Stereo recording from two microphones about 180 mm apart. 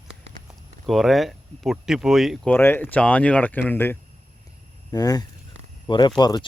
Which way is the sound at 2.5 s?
10° left (ahead or behind).